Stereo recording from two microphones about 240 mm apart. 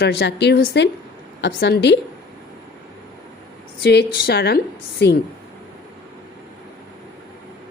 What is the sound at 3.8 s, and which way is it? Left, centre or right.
A woman's voice, left.